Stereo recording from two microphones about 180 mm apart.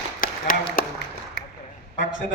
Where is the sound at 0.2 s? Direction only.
50° left (ahead or behind).